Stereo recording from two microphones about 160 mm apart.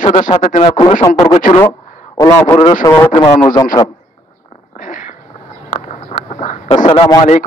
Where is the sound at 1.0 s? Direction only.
20° left (ahead or behind).